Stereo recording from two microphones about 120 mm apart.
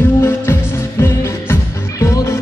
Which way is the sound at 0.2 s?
20° left (ahead or behind).